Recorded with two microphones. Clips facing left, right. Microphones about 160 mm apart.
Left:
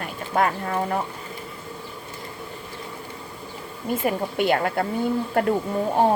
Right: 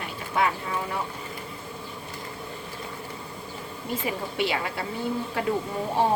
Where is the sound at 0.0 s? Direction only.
50° left (ahead or behind).